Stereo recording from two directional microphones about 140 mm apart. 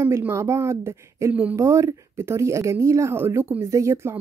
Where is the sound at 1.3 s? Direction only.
10° right (ahead or behind).